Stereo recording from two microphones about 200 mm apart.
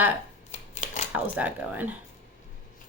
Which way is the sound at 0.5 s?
35° left (ahead or behind).